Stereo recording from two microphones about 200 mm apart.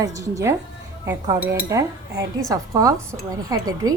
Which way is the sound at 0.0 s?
15° right (ahead or behind).